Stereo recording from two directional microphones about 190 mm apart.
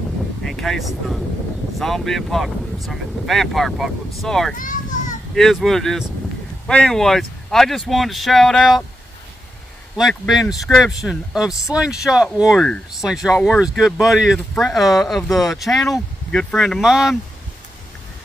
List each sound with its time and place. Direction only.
0.5 s speech: centre (ahead or behind)
4.6 s children playing: 45° left (ahead or behind)
5.3 s speech: centre (ahead or behind)
9.9 s speech: centre (ahead or behind)